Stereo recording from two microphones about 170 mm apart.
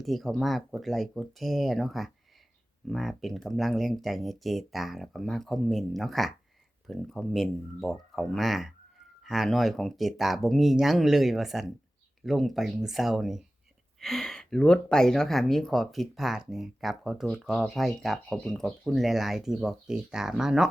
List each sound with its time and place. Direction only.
0.0 s speech: centre (ahead or behind)